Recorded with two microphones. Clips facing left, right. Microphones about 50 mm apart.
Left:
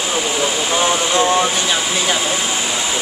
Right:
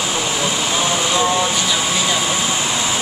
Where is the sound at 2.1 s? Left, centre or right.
Centre.